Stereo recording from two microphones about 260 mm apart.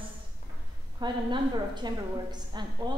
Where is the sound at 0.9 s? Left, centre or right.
Centre.